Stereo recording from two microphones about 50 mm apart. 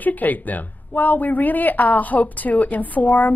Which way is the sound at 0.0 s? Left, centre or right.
Left.